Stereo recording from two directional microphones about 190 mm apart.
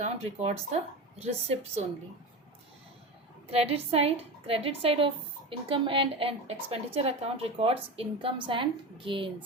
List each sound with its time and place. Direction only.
0.0 s a woman's voice: 35° right (ahead or behind)
3.5 s a woman's voice: 30° right (ahead or behind)